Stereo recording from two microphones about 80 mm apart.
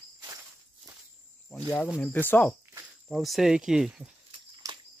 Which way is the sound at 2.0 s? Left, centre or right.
Left.